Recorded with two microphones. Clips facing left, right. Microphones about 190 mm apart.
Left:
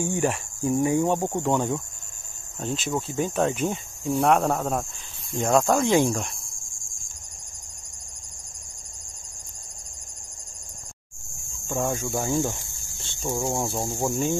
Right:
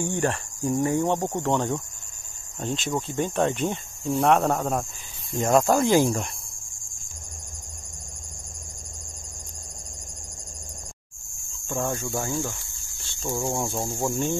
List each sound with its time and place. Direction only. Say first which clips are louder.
0.0 s speech: left 1 dB; 10° left (ahead or behind)
2.6 s speech: even; centre (ahead or behind)
11.7 s speech: left 1 dB; 5° left (ahead or behind)
12.0 s speech: left 3 dB; 15° left (ahead or behind)
13.7 s cricket: left 1 dB; 20° left (ahead or behind)